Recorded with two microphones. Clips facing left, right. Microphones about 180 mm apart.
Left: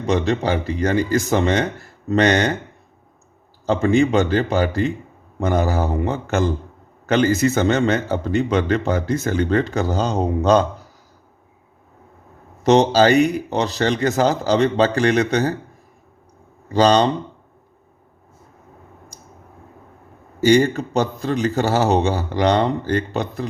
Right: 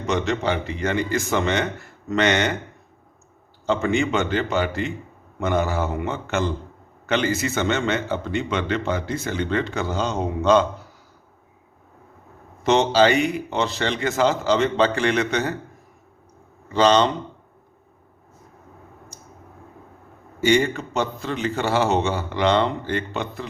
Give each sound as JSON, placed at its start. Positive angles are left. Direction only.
{"t": 0.0, "sound": "a man's voice", "side_deg": 35}
{"t": 3.7, "sound": "a man's voice", "side_deg": 35}
{"t": 12.6, "sound": "a man's voice", "side_deg": 40}
{"t": 16.6, "sound": "a man's voice", "side_deg": 40}
{"t": 20.4, "sound": "a man's voice", "side_deg": 40}